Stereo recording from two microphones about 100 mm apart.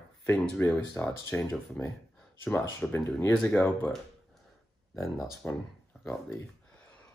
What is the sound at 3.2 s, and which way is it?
Speech, 25° left (ahead or behind).